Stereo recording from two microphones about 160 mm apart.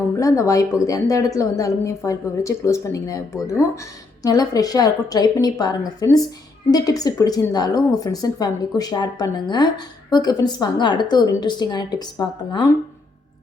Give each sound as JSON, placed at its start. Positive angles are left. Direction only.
{"t": 0.2, "sound": "a woman's voice", "side_deg": 20}